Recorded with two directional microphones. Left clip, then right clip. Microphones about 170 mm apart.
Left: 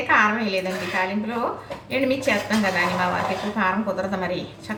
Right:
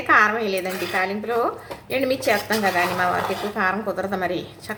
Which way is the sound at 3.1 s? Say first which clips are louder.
Right 1 dB; 30° right (ahead or behind).